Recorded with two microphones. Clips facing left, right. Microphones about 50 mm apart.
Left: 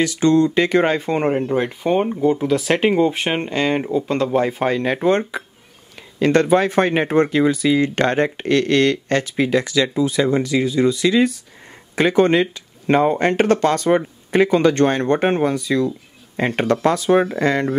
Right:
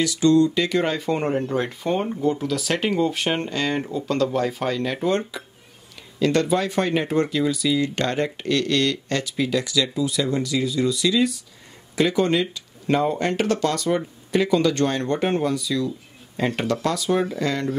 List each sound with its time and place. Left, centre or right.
0.0 s speech: left